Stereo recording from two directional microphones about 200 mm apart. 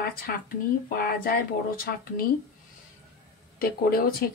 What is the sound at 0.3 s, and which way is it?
Speech, 50° left (ahead or behind).